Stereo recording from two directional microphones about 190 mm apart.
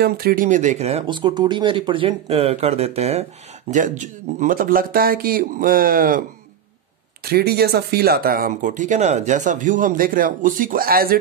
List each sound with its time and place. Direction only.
0.0 s speech: 50° right (ahead or behind)
7.2 s speech: 55° right (ahead or behind)